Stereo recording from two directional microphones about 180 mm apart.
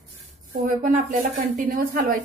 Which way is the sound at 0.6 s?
45° right (ahead or behind).